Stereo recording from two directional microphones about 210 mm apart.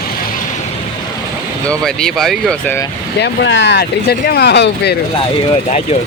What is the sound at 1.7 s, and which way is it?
Speech, 5° left (ahead or behind).